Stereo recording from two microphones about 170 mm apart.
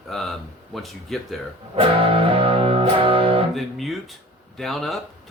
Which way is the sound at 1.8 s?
30° right (ahead or behind).